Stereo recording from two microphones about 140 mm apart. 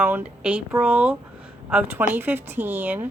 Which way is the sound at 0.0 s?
10° right (ahead or behind).